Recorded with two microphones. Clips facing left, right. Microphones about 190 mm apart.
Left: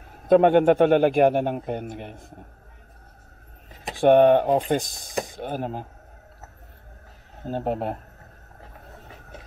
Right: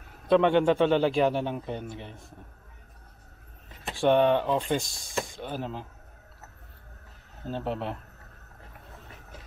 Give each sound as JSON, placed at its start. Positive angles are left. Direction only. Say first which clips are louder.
{"t": 0.3, "sound": "a man's voice", "louder": "left 5 dB", "side_deg": 50}
{"t": 4.0, "sound": "a man's voice", "louder": "left 6 dB", "side_deg": 50}
{"t": 7.4, "sound": "a man's voice", "louder": "left 5 dB", "side_deg": 45}